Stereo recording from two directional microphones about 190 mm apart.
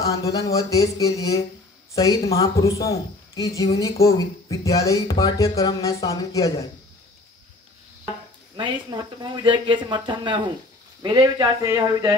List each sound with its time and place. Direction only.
0.0 s speech: 20° left (ahead or behind)
8.5 s speech: 25° right (ahead or behind)